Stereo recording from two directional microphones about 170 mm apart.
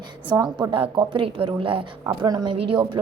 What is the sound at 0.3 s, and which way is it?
Speech, 15° right (ahead or behind).